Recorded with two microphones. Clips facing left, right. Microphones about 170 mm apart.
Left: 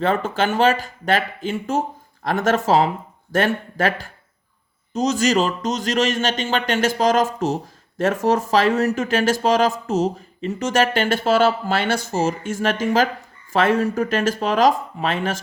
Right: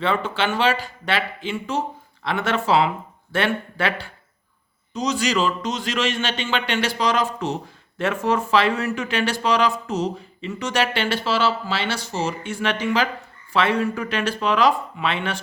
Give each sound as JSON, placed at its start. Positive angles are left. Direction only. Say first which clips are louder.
{"t": 0.0, "sound": "speech", "louder": "left 3 dB", "side_deg": 45}